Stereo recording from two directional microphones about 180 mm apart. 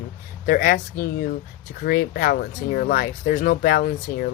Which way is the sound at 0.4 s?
55° left (ahead or behind).